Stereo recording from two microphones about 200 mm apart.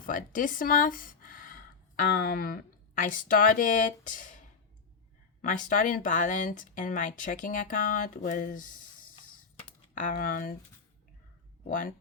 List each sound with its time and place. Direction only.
0.0 s speech: 40° left (ahead or behind)
9.9 s speech: 45° left (ahead or behind)
11.6 s speech: 40° left (ahead or behind)